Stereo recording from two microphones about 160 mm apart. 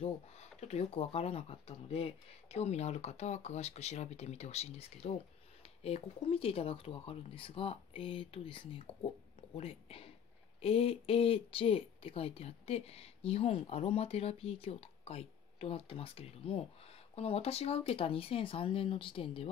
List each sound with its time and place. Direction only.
0.0 s speech: 45° left (ahead or behind)